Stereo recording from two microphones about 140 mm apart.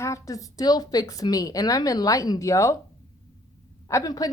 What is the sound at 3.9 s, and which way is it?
Speech, 25° left (ahead or behind).